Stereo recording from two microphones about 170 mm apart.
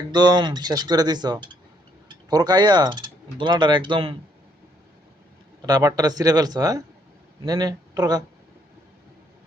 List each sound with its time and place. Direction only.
0.1 s speech: 25° right (ahead or behind)
5.6 s speech: 20° right (ahead or behind)